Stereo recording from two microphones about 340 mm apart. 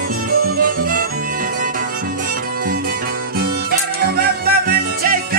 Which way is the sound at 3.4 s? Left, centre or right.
Right.